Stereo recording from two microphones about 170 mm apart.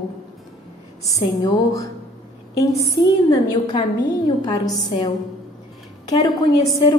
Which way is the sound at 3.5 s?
25° left (ahead or behind).